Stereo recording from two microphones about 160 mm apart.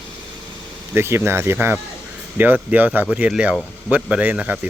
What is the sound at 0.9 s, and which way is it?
Speech, 15° right (ahead or behind).